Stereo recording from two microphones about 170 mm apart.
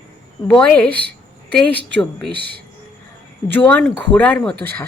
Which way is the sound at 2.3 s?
70° right (ahead or behind).